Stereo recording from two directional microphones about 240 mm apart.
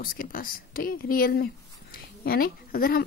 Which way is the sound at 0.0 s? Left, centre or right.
Left.